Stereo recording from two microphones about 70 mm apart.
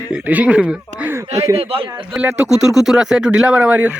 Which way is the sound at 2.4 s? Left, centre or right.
Centre.